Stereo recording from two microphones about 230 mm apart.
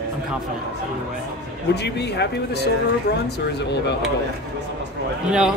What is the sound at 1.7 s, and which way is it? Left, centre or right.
Speech, left.